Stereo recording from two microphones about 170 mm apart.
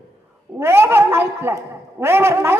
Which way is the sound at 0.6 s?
15° right (ahead or behind).